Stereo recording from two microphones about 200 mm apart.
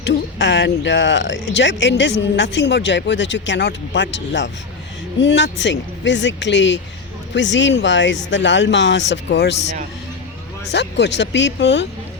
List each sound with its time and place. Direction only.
0.0 s speech: 60° left (ahead or behind)
10.7 s speech: 60° left (ahead or behind)